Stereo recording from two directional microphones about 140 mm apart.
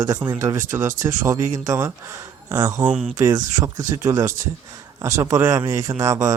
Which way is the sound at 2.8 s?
10° right (ahead or behind).